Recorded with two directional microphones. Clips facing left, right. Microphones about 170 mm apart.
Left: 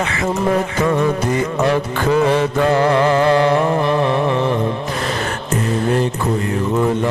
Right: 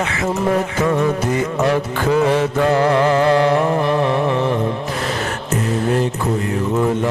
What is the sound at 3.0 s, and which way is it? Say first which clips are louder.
Carnatic music: even; 35° right (ahead or behind).